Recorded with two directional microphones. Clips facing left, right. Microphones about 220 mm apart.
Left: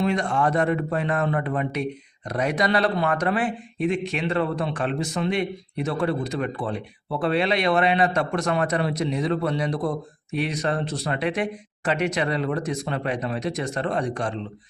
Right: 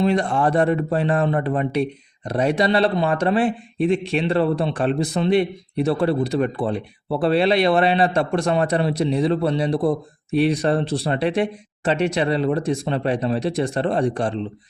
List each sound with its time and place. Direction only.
0.0 s speech: 35° right (ahead or behind)